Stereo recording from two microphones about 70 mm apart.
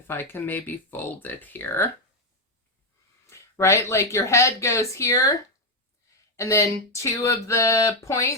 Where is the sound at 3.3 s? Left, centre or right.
Left.